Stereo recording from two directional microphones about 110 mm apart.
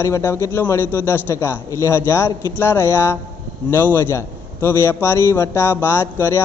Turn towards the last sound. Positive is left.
turn(degrees=25)  # may be behind; listen again after turning